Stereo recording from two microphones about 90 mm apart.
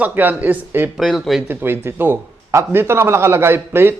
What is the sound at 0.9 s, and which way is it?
Speech, centre (ahead or behind).